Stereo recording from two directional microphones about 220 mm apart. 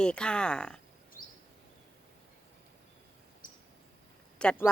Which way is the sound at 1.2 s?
40° left (ahead or behind).